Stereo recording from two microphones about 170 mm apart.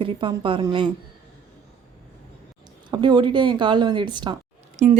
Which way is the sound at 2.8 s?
25° right (ahead or behind).